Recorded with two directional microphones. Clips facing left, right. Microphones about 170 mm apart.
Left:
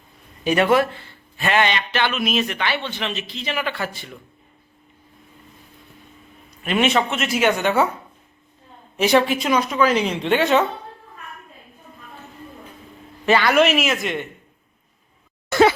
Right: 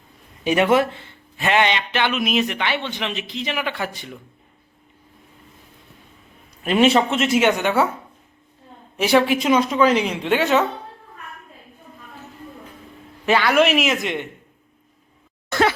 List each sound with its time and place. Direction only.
0.4 s a man's voice: 20° right (ahead or behind)
6.7 s a woman's voice: 35° right (ahead or behind); by 7.9 s 10° right (ahead or behind)
9.0 s a man's voice: 10° right (ahead or behind)
13.2 s a man's voice: 5° right (ahead or behind); by 14.3 s 20° right (ahead or behind)
15.5 s a sound: 5° left (ahead or behind)